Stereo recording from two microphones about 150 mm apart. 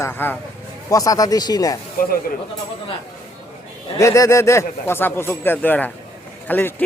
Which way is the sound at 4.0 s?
20° left (ahead or behind).